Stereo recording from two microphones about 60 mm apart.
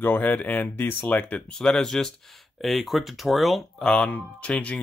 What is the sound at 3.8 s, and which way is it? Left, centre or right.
Speech, centre.